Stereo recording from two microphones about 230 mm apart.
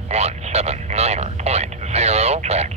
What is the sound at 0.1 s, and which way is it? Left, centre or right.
Vehicle, right.